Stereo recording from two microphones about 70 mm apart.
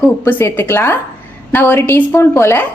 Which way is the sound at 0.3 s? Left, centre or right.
Left.